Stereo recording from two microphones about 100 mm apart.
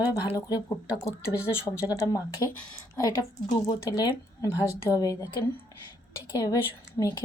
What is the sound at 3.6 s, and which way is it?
Speech, 40° left (ahead or behind).